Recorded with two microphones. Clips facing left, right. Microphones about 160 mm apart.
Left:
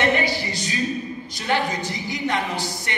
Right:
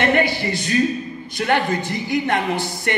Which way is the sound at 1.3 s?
55° right (ahead or behind).